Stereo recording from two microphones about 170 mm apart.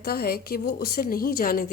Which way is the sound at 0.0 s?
60° left (ahead or behind).